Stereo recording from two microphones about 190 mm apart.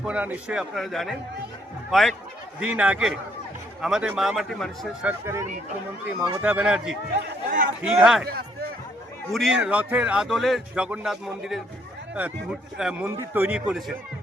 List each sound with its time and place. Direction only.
0.0 s speech: 5° right (ahead or behind)
5.2 s speech: 15° right (ahead or behind)
7.5 s speech: 45° right (ahead or behind)
7.9 s speech: centre (ahead or behind)
8.3 s speech: 55° right (ahead or behind)
9.3 s speech: centre (ahead or behind)